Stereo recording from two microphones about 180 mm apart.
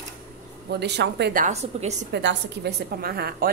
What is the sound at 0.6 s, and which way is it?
Speech, 70° right (ahead or behind).